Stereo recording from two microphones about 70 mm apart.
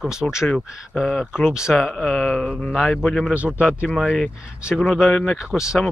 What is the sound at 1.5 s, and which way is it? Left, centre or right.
Speech, centre.